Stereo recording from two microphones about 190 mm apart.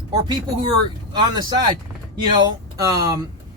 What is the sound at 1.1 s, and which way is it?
Speech, 20° right (ahead or behind).